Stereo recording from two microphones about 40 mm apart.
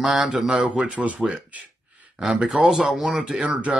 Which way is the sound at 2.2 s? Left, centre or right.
Centre.